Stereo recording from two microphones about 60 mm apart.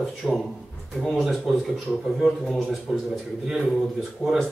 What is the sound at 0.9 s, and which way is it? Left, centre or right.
Speech, centre.